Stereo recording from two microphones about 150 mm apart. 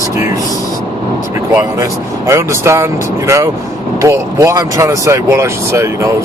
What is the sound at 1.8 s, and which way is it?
Speech, 20° right (ahead or behind).